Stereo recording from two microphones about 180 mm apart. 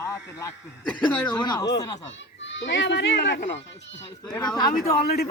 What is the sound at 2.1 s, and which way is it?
A child's voice, 90° left.